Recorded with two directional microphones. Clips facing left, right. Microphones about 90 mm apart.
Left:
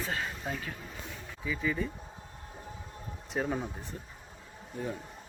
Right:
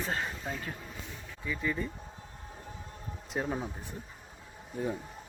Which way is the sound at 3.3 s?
Centre (ahead or behind).